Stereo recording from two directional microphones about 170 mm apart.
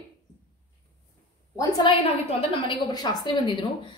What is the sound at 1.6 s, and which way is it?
Speech, 30° left (ahead or behind).